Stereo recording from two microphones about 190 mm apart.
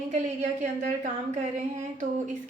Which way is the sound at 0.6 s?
40° right (ahead or behind).